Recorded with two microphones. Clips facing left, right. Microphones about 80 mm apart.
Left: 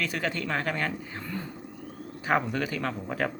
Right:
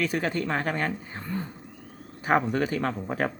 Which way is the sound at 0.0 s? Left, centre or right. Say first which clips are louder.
Right 4 dB; right.